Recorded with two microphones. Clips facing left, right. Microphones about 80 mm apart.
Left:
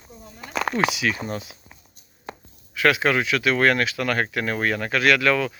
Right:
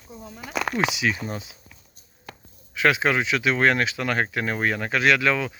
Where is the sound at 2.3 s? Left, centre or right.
Left.